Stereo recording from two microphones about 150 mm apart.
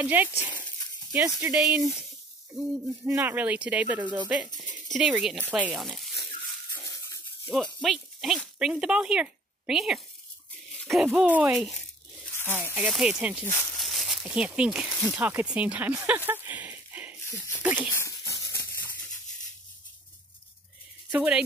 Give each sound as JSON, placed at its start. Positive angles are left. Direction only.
{"t": 0.0, "sound": "speech", "side_deg": -10}
{"t": 2.5, "sound": "speech", "side_deg": -15}
{"t": 6.7, "sound": "a sound", "side_deg": 20}
{"t": 7.6, "sound": "speech", "side_deg": 0}
{"t": 10.8, "sound": "a sound", "side_deg": 0}
{"t": 11.1, "sound": "speech", "side_deg": -10}
{"t": 12.7, "sound": "speech", "side_deg": -5}
{"t": 13.7, "sound": "a sound", "side_deg": 0}
{"t": 15.1, "sound": "speech", "side_deg": -10}
{"t": 17.6, "sound": "dog", "side_deg": -10}
{"t": 17.9, "sound": "a sound", "side_deg": 20}
{"t": 21.1, "sound": "speech", "side_deg": -10}